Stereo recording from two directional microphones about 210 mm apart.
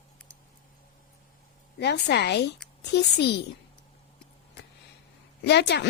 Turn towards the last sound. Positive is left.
turn(degrees=55)  # may be behind; listen again after turning